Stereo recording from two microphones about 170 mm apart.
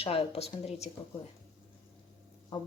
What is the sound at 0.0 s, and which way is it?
Speech, 35° left (ahead or behind).